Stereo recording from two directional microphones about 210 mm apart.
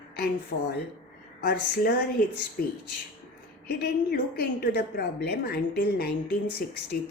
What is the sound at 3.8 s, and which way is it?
A woman's voice, 50° left (ahead or behind).